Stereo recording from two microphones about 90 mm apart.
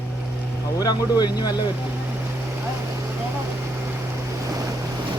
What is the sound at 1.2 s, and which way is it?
Speech, 50° left (ahead or behind).